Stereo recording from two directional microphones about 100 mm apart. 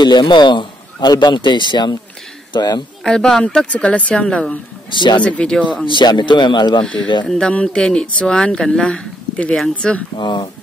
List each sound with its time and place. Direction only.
0.0 s a man's voice: 45° left (ahead or behind)
3.0 s speech: 5° left (ahead or behind)
4.9 s speech: 50° left (ahead or behind)
5.2 s speech: 10° left (ahead or behind)
5.9 s speech: 50° left (ahead or behind)
6.8 s speech: 5° left (ahead or behind)
10.1 s speech: 50° left (ahead or behind)